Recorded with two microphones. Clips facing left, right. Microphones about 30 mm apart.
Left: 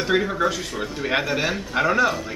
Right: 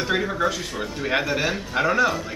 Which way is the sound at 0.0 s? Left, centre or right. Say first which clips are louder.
Left 2 dB; centre.